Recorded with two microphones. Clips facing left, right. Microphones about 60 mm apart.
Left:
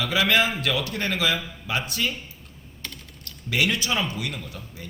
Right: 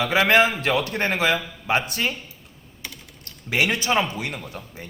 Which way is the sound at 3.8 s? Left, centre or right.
Right.